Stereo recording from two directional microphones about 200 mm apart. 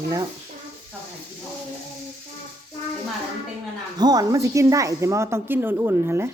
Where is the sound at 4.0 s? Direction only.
20° right (ahead or behind).